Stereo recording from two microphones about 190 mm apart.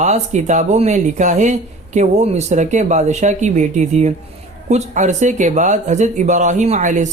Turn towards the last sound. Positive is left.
turn(degrees=-40)  # may be behind; listen again after turning